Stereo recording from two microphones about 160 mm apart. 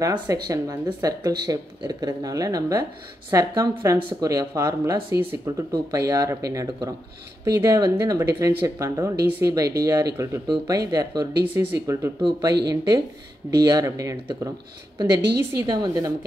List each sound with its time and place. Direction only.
0.0 s speech: 20° right (ahead or behind)
12.2 s speech: 30° right (ahead or behind)